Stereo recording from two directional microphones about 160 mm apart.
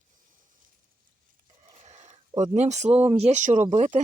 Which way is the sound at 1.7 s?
45° right (ahead or behind).